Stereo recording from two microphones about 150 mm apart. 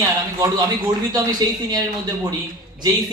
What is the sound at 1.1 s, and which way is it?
Speech, 25° right (ahead or behind).